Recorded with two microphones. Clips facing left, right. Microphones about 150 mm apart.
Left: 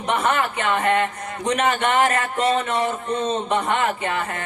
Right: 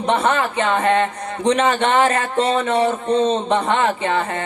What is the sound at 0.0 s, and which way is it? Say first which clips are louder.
A man's voice: right 3 dB; 30° right (ahead or behind).